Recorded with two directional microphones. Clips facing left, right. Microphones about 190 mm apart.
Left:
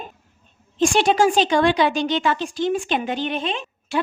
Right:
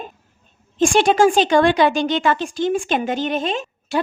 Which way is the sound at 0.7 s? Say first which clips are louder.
Right 2 dB; 50° right (ahead or behind).